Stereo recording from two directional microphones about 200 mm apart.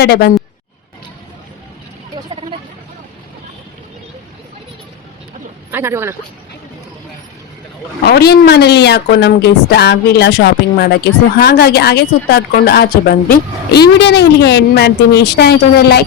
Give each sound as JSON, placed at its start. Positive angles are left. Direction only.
{"t": 0.0, "sound": "a man's voice", "side_deg": 50}
{"t": 5.7, "sound": "speech", "side_deg": -10}
{"t": 8.0, "sound": "speech", "side_deg": 55}